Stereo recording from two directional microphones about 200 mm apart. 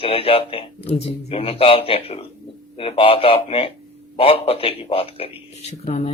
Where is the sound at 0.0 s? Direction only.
30° left (ahead or behind).